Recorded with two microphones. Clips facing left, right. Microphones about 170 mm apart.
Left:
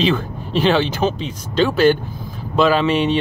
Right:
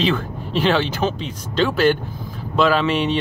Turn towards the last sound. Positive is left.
turn(degrees=15)  # may be behind; listen again after turning